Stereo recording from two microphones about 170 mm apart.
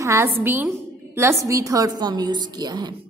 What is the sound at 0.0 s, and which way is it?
A woman's voice, 15° right (ahead or behind).